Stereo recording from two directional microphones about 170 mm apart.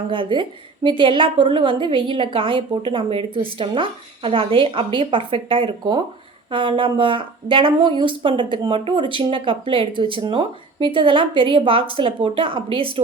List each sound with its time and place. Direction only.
0.1 s a woman's voice: 30° right (ahead or behind)